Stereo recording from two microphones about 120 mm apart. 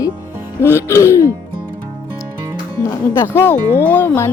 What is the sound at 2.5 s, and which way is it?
Speech, 30° left (ahead or behind).